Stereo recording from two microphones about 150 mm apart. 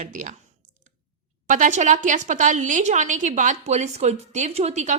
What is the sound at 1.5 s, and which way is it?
A woman's voice, 55° right (ahead or behind).